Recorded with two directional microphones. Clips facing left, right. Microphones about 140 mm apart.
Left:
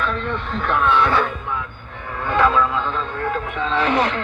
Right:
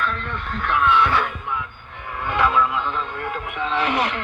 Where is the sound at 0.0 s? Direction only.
30° left (ahead or behind).